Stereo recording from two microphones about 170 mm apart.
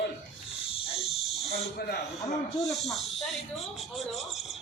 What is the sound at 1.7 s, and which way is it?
Speech, 70° left (ahead or behind).